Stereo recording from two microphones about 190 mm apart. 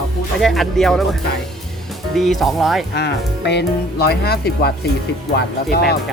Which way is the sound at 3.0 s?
65° left (ahead or behind).